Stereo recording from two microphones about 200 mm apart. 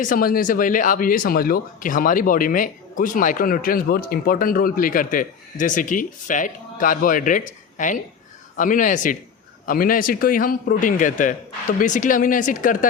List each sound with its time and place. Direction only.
0.0 s speech: 45° left (ahead or behind)